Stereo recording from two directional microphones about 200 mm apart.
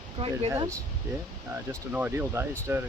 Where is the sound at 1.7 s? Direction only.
10° right (ahead or behind).